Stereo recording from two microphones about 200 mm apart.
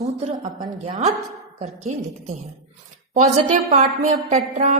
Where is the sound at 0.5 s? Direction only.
20° right (ahead or behind).